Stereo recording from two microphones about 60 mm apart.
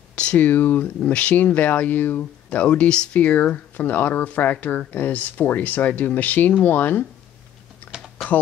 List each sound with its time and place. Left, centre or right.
0.1 s speech: centre